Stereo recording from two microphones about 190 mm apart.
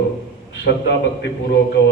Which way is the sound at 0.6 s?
65° left (ahead or behind).